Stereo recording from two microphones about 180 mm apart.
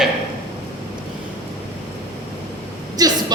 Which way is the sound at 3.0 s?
20° right (ahead or behind).